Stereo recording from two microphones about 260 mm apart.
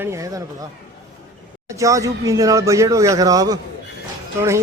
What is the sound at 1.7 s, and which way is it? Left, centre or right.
A man's voice, centre.